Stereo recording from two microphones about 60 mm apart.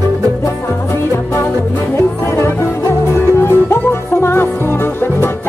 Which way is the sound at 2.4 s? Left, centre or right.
Left.